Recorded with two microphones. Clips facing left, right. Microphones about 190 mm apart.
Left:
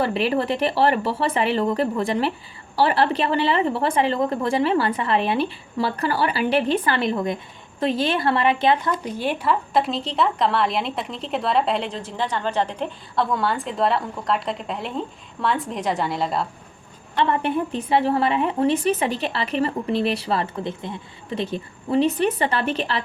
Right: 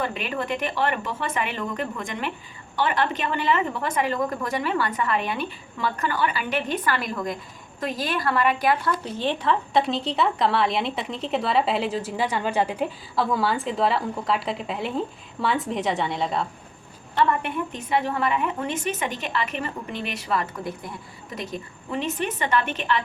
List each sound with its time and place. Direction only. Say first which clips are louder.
0.0 s a woman's voice: left 7 dB; 35° left (ahead or behind); by 16.5 s centre (ahead or behind)
17.2 s a woman's voice: left 3 dB; 30° left (ahead or behind)